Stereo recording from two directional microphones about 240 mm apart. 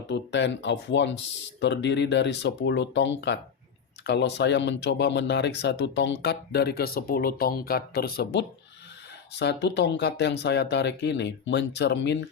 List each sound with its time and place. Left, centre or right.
0.1 s speech: left